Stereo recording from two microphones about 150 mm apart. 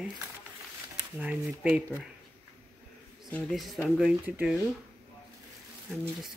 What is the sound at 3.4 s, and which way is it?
Speech, centre (ahead or behind).